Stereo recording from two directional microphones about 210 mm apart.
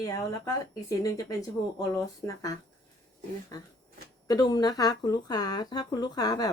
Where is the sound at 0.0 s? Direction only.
15° left (ahead or behind).